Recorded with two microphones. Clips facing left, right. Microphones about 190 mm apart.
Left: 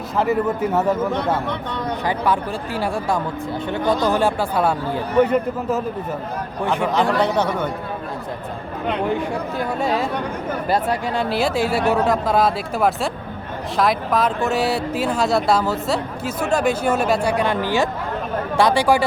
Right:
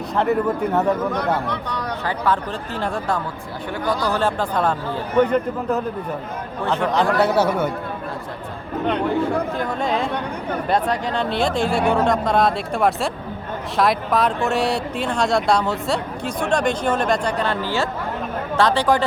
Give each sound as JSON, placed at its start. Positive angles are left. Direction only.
{"t": 0.2, "sound": "speech", "side_deg": 0}
{"t": 1.7, "sound": "speech", "side_deg": 15}
{"t": 3.7, "sound": "speech", "side_deg": 20}
{"t": 6.8, "sound": "speech", "side_deg": 0}
{"t": 9.8, "sound": "speech", "side_deg": 5}